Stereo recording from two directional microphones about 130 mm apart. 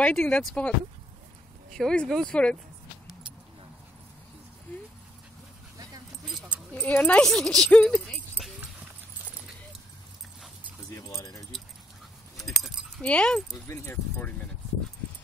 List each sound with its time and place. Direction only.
0.0 s speech: 10° left (ahead or behind)
1.8 s speech: 5° left (ahead or behind)
6.7 s speech: 10° left (ahead or behind)
11.0 s speech: 25° left (ahead or behind)
12.4 s keys jangling: centre (ahead or behind)
13.0 s speech: 10° left (ahead or behind)